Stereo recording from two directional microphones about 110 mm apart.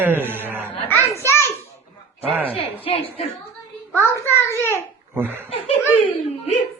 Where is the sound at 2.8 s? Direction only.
55° left (ahead or behind).